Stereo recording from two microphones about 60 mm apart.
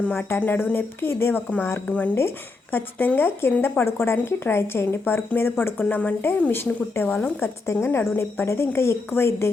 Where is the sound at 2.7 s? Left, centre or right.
Left.